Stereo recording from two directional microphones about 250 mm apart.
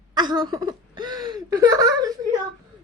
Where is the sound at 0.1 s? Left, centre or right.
Centre.